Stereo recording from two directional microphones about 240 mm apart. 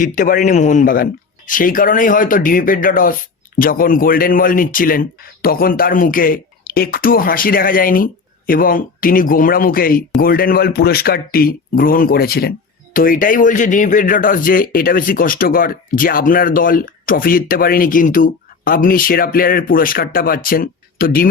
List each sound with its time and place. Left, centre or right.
0.0 s speech: left